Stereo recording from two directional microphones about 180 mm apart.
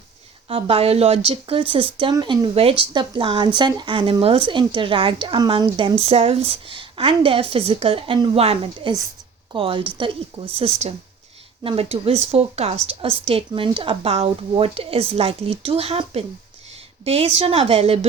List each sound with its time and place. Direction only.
0.4 s a woman's voice: 30° right (ahead or behind)